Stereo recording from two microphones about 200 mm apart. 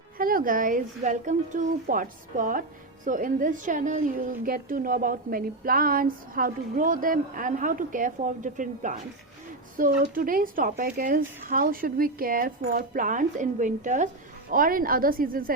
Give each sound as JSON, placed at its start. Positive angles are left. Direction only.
{"t": 0.2, "sound": "a woman's voice", "side_deg": -45}